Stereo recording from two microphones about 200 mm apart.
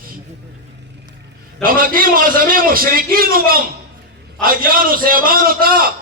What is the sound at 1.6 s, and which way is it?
A man's voice, 45° right (ahead or behind).